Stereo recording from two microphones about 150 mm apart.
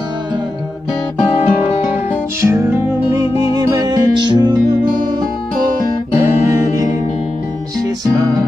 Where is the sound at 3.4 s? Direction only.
25° right (ahead or behind).